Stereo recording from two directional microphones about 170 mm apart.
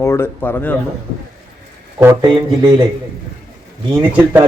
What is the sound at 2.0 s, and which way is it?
Speech, 15° right (ahead or behind).